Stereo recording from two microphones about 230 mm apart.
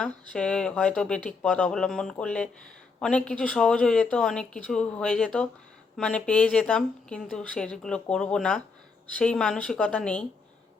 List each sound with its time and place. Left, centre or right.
0.3 s speech: centre